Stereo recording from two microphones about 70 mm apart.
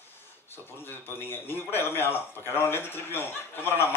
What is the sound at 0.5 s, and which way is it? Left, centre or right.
Speech, left.